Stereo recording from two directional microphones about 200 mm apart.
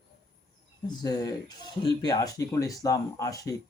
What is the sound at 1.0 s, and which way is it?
Speech, 20° left (ahead or behind).